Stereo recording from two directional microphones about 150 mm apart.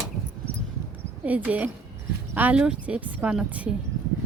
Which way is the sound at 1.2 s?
10° right (ahead or behind).